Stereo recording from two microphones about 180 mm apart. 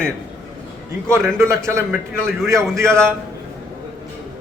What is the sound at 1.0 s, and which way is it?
Speech, 15° right (ahead or behind).